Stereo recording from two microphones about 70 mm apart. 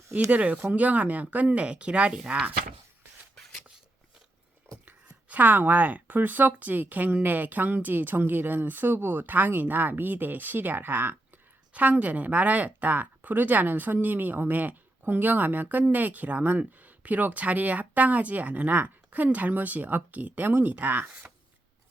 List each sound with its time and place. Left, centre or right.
0.3 s speech: centre
4.9 s speech: right